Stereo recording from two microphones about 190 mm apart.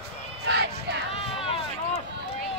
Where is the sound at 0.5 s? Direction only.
60° right (ahead or behind).